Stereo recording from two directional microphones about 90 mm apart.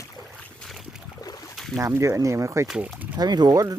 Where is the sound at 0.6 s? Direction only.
Centre (ahead or behind).